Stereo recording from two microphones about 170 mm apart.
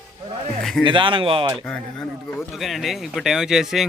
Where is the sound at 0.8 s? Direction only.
30° right (ahead or behind).